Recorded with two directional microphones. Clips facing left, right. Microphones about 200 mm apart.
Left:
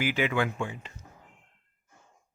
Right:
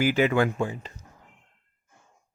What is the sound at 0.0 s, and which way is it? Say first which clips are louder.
Speech: right 6 dB; 40° right (ahead or behind).